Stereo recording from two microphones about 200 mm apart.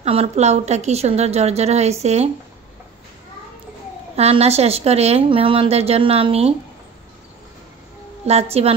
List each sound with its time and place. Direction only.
0.0 s a woman's voice: 30° right (ahead or behind)
4.1 s a woman's voice: 30° right (ahead or behind)
8.3 s a woman's voice: 30° right (ahead or behind)